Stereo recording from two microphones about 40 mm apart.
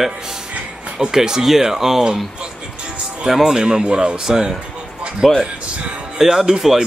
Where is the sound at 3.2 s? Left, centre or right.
Centre.